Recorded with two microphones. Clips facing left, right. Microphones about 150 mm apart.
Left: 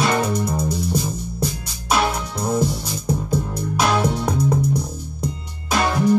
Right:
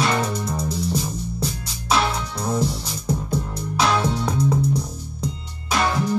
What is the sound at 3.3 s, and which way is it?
Music, 50° left (ahead or behind).